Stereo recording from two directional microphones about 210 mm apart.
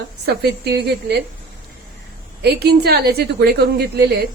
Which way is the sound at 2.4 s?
50° right (ahead or behind).